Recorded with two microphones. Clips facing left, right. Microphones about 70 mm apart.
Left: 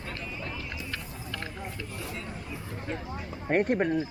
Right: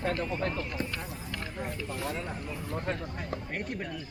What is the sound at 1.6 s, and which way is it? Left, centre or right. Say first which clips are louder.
Speech: right 3 dB; right.